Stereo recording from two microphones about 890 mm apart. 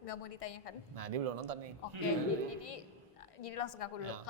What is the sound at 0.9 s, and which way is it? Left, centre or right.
Speech, right.